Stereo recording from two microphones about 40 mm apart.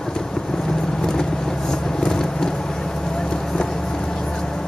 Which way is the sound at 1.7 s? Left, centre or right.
Centre.